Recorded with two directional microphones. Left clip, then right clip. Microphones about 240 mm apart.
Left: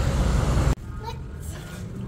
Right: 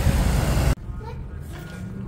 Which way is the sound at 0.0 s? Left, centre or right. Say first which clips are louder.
Right 2 dB; right.